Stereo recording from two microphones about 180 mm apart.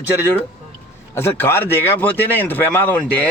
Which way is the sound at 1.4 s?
15° left (ahead or behind).